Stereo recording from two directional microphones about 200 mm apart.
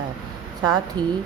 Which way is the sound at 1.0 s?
25° right (ahead or behind).